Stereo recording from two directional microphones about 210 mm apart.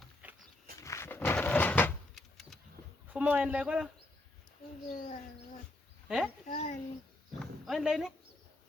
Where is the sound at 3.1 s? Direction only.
5° right (ahead or behind).